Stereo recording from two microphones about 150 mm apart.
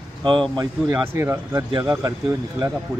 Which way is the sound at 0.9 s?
15° right (ahead or behind).